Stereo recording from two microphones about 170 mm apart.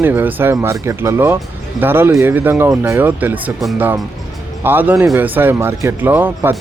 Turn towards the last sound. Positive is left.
turn(degrees=-10)  # may be behind; listen again after turning